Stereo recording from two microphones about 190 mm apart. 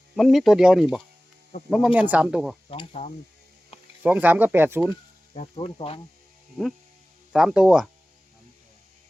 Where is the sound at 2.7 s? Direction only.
35° left (ahead or behind).